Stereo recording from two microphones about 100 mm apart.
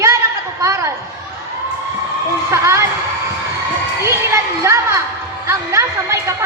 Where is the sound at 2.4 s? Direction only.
30° right (ahead or behind).